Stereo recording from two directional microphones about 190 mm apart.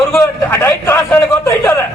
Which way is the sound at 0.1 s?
10° left (ahead or behind).